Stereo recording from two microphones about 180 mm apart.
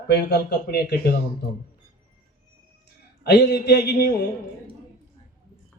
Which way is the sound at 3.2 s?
70° left (ahead or behind).